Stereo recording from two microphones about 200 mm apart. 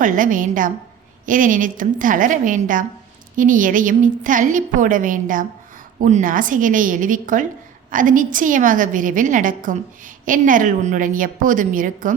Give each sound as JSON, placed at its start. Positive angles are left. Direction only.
{"t": 0.0, "sound": "a woman's voice", "side_deg": -40}